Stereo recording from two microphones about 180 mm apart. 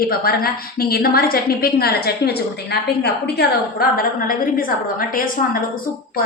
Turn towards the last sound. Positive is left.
turn(degrees=50)  # may be behind; listen again after turning